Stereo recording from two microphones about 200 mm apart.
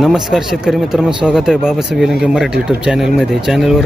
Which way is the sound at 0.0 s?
Centre (ahead or behind).